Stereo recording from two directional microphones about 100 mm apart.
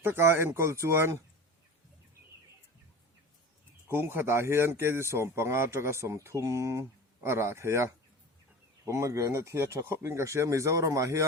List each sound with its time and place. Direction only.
0.0 s speech: 25° right (ahead or behind)
3.8 s speech: 20° right (ahead or behind)